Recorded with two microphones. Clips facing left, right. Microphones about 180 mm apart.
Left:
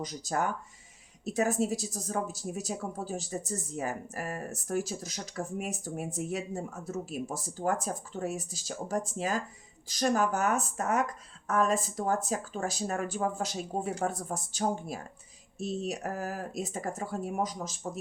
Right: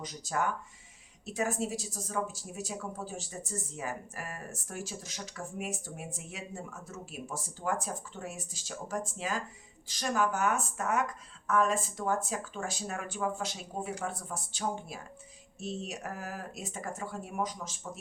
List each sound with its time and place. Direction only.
0.0 s a woman's voice: 40° left (ahead or behind)